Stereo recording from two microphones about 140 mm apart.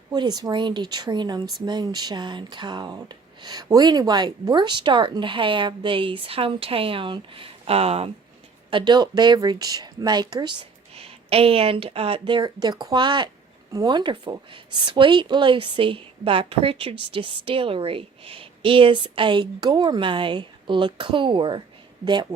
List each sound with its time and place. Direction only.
0.1 s speech: 30° right (ahead or behind)
8.7 s speech: 35° right (ahead or behind)
10.9 s speech: 45° right (ahead or behind)